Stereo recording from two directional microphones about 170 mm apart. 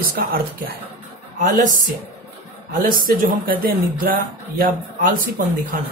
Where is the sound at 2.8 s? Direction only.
55° right (ahead or behind).